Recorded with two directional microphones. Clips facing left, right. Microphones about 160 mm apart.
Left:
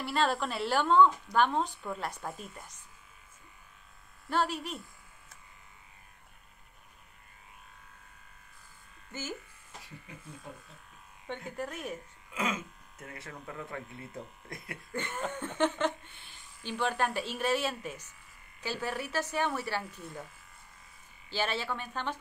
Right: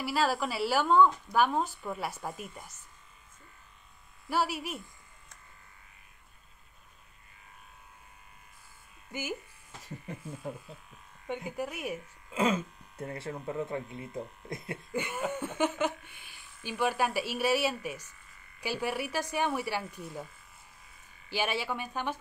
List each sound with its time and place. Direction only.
0.0 s a woman's voice: 5° right (ahead or behind)
4.3 s speech: 10° right (ahead or behind)
9.1 s speech: 15° right (ahead or behind)
11.2 s speech: 10° right (ahead or behind)
12.3 s speech: 30° right (ahead or behind)
14.9 s speech: 10° right (ahead or behind)
21.3 s speech: 10° right (ahead or behind)